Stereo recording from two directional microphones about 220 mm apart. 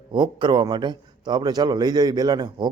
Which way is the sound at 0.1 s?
20° right (ahead or behind).